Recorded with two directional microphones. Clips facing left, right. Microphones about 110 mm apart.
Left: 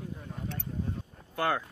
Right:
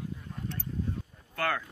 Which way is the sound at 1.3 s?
20° left (ahead or behind).